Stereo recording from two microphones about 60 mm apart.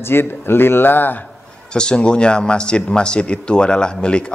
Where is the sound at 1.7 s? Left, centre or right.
Centre.